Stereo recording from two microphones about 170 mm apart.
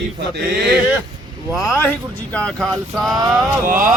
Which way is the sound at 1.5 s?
15° left (ahead or behind).